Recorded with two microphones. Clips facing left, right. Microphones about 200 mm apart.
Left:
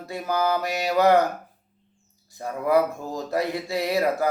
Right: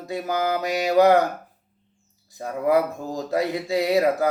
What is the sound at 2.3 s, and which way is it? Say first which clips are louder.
Speech: right 2 dB; 15° right (ahead or behind).